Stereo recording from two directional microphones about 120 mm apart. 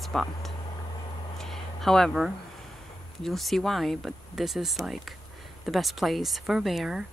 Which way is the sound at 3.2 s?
Centre (ahead or behind).